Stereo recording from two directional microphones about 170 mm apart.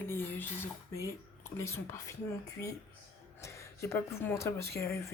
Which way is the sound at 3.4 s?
15° left (ahead or behind).